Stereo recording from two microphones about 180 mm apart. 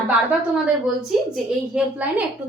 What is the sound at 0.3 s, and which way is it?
Speech, 5° right (ahead or behind).